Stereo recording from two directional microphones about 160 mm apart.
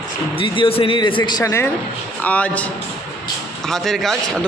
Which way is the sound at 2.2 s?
10° left (ahead or behind).